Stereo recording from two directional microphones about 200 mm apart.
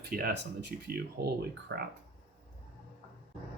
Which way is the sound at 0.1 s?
50° right (ahead or behind).